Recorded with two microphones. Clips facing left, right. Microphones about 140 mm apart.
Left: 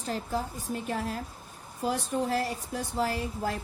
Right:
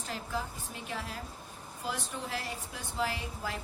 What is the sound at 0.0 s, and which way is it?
A woman's voice, 40° left (ahead or behind).